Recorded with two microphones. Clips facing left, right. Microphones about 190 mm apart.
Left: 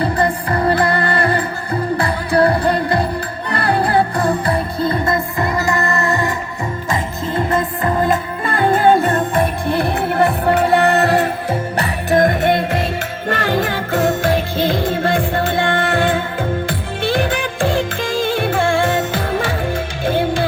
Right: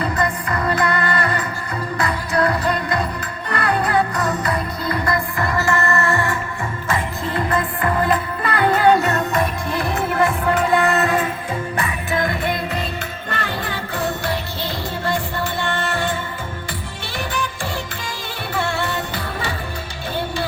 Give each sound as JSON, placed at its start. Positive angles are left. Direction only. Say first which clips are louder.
{"t": 0.0, "sound": "music", "louder": "left 4 dB", "side_deg": 30}
{"t": 9.6, "sound": "music", "louder": "left 4 dB", "side_deg": 60}
{"t": 12.1, "sound": "music", "louder": "left 9 dB", "side_deg": 45}
{"t": 13.2, "sound": "music", "louder": "left 10 dB", "side_deg": 90}
{"t": 14.1, "sound": "music", "louder": "left 8 dB", "side_deg": 50}
{"t": 18.2, "sound": "music", "louder": "left 8 dB", "side_deg": 90}